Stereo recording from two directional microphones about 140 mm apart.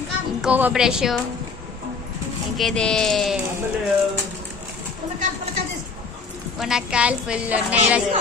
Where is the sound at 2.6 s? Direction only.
5° left (ahead or behind).